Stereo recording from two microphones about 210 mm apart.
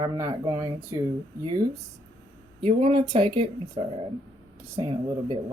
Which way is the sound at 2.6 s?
25° right (ahead or behind).